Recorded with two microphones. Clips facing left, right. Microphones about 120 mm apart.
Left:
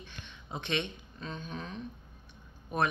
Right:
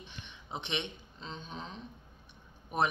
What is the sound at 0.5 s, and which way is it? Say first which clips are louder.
Speech: left 3 dB; 20° right (ahead or behind).